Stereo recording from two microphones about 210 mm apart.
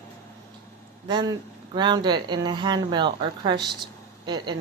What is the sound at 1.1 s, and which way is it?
Speech, 20° right (ahead or behind).